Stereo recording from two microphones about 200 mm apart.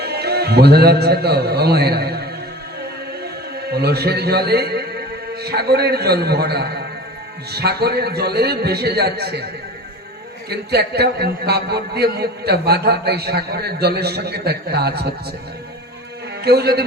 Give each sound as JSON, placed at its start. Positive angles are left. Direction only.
{"t": 0.0, "sound": "a man's voice", "side_deg": -55}
{"t": 3.6, "sound": "a man's voice", "side_deg": -55}
{"t": 10.5, "sound": "a man's voice", "side_deg": -55}
{"t": 16.4, "sound": "a man's voice", "side_deg": -55}